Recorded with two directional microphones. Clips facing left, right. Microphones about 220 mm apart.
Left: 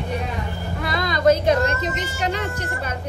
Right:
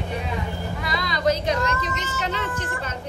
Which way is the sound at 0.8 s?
50° left (ahead or behind).